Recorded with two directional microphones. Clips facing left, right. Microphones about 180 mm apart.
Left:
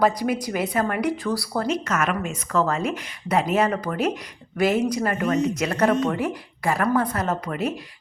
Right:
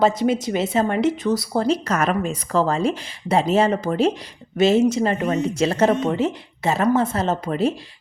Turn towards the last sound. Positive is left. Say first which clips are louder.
# right 4 dB
turn(degrees=-30)  # may be behind; listen again after turning